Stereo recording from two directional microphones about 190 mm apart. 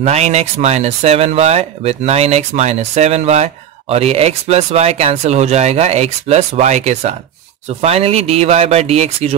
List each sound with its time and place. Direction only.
0.0 s speech: 35° right (ahead or behind)